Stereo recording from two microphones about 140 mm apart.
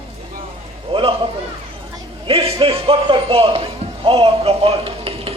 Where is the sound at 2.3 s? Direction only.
40° right (ahead or behind).